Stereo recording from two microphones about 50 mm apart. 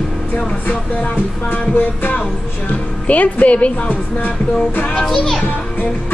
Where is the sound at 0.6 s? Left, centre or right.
Left.